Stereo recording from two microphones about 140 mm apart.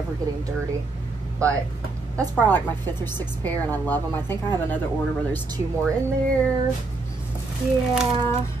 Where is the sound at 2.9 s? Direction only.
30° right (ahead or behind).